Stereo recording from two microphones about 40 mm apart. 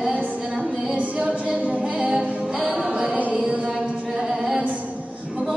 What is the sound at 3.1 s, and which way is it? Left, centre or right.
Chant, right.